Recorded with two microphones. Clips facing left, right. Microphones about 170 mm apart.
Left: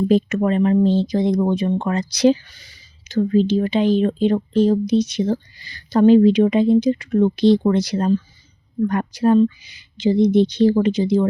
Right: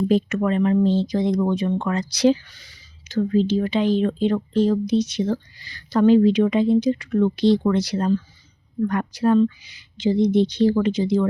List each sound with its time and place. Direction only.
0.1 s speech: 20° left (ahead or behind)